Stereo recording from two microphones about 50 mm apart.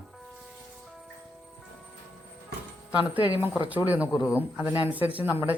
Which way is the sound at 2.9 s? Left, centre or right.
Right.